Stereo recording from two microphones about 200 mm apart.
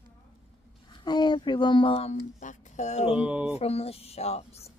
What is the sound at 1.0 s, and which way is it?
Speech, 20° left (ahead or behind).